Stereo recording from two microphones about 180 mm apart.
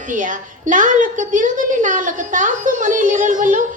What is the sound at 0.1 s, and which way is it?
A woman's voice, 45° right (ahead or behind).